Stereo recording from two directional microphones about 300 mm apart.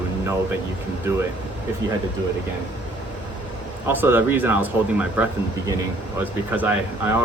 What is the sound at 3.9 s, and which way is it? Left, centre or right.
Speech, centre.